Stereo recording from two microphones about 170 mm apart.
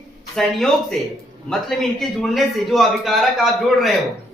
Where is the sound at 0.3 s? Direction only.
5° left (ahead or behind).